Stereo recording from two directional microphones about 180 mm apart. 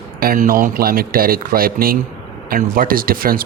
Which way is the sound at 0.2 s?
55° right (ahead or behind).